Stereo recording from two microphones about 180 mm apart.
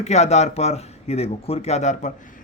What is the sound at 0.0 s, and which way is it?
Speech, 40° left (ahead or behind).